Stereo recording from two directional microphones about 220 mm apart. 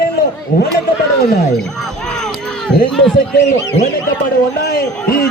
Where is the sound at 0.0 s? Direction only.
40° left (ahead or behind).